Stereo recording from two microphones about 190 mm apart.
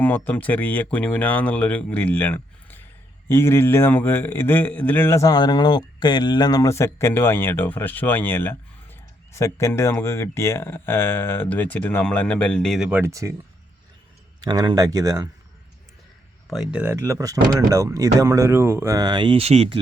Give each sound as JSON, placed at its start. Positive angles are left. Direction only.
{"t": 0.0, "sound": "speech", "side_deg": 10}
{"t": 14.4, "sound": "speech", "side_deg": -25}
{"t": 16.5, "sound": "speech", "side_deg": -5}